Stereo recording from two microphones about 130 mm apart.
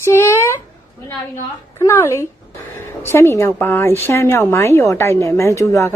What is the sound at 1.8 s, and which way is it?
A woman's voice, 20° left (ahead or behind).